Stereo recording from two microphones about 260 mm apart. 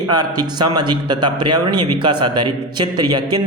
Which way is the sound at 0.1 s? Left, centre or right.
Centre.